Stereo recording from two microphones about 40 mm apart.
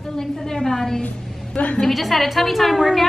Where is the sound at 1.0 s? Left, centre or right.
Left.